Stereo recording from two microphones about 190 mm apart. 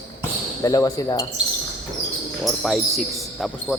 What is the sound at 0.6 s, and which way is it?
Speech, 15° left (ahead or behind).